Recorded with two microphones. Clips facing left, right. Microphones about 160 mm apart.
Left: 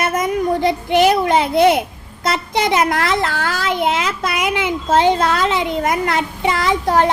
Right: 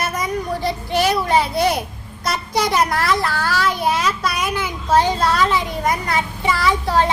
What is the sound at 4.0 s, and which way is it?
A child's voice, 65° left (ahead or behind).